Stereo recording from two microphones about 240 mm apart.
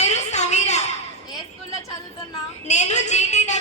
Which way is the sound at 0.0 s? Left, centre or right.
Left.